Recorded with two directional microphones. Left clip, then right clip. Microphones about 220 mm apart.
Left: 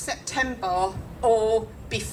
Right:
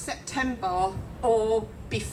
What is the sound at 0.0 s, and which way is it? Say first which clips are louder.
A woman's voice: left 3 dB; 45° left (ahead or behind).